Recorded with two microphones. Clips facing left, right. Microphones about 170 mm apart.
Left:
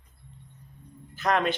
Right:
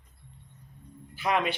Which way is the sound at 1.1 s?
10° right (ahead or behind).